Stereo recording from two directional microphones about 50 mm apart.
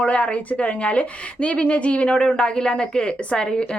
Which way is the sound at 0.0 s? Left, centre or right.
Left.